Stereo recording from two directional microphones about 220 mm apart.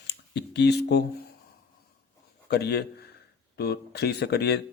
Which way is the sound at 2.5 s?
50° left (ahead or behind).